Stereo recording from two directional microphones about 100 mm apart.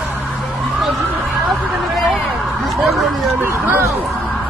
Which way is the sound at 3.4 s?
20° right (ahead or behind).